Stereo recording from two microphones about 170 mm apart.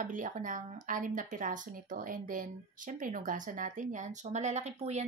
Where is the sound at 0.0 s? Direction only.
50° right (ahead or behind).